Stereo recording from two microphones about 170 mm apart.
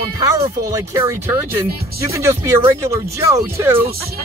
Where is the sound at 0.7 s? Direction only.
15° right (ahead or behind).